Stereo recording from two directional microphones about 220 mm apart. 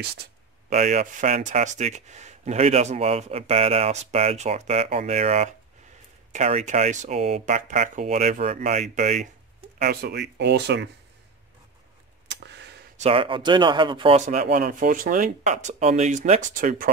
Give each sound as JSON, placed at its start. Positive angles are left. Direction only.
{"t": 0.7, "sound": "speech", "side_deg": -35}
{"t": 9.8, "sound": "speech", "side_deg": -45}
{"t": 12.3, "sound": "a sound", "side_deg": -50}
{"t": 12.9, "sound": "speech", "side_deg": -25}